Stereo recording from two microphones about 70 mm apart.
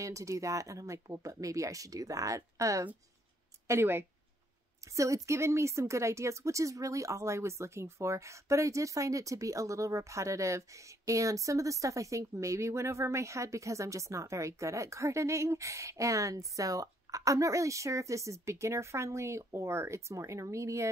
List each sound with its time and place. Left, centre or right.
0.0 s a woman's voice: right
3.6 s speech: right
4.9 s a woman's voice: right